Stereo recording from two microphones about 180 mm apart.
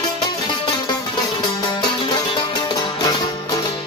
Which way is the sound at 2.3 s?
25° left (ahead or behind).